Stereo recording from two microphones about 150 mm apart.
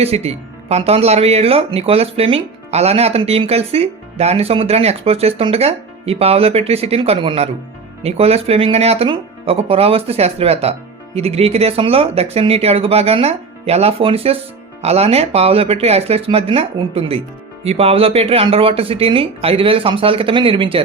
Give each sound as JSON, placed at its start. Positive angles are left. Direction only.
{"t": 0.0, "sound": "speech", "side_deg": -45}